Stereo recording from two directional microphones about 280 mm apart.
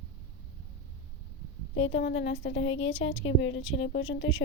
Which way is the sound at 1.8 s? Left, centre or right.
Left.